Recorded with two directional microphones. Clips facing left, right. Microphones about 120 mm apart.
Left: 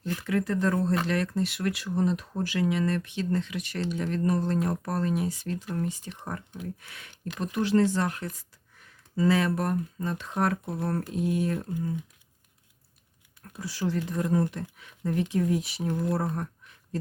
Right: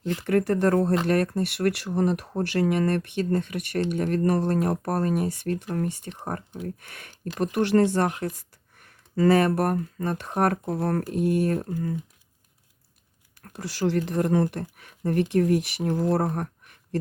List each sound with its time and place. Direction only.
0.3 s speech: 55° right (ahead or behind)
1.0 s speech: 50° right (ahead or behind)
6.2 s speech: 50° right (ahead or behind)
13.4 s speech: 75° right (ahead or behind)
14.5 s speech: 55° right (ahead or behind); by 15.9 s 75° right (ahead or behind)
16.0 s speech: 90° right